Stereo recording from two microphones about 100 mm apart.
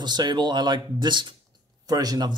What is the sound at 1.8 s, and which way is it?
Speech, 40° right (ahead or behind).